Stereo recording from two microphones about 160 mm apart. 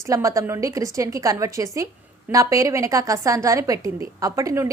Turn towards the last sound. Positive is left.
turn(degrees=-20)  # may be behind; listen again after turning